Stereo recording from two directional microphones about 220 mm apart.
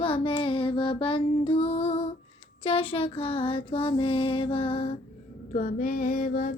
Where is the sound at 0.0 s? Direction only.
25° left (ahead or behind).